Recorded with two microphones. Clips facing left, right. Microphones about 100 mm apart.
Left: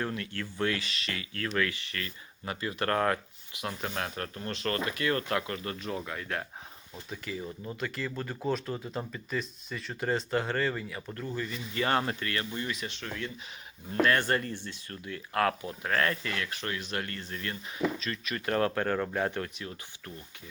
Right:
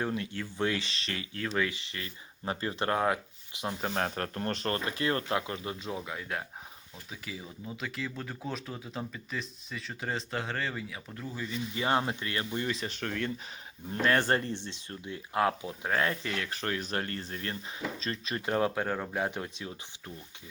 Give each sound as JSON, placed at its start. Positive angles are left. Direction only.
{"t": 0.0, "sound": "speech", "side_deg": -20}
{"t": 2.8, "sound": "speech", "side_deg": -10}
{"t": 3.8, "sound": "speech", "side_deg": -35}
{"t": 4.7, "sound": "speech", "side_deg": -30}
{"t": 5.9, "sound": "speech", "side_deg": -5}
{"t": 11.7, "sound": "speech", "side_deg": -15}
{"t": 13.0, "sound": "speech", "side_deg": -55}
{"t": 14.0, "sound": "speech", "side_deg": -30}
{"t": 18.4, "sound": "speech", "side_deg": -10}